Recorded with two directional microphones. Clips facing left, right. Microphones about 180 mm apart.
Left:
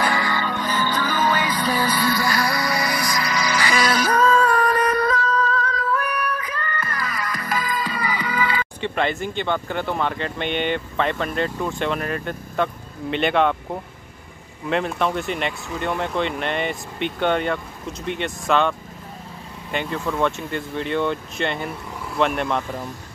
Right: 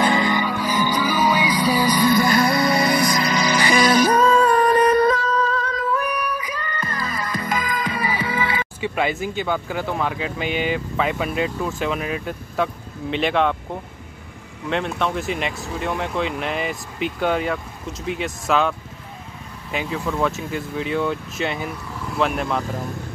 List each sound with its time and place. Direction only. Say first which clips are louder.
0.0 s music: right 4 dB; 20° right (ahead or behind)
8.8 s speech: right 1 dB; 5° right (ahead or behind)
14.7 s speech: left 1 dB; centre (ahead or behind)